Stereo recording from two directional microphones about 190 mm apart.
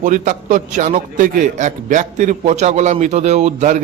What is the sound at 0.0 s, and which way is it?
A man's voice, 40° right (ahead or behind).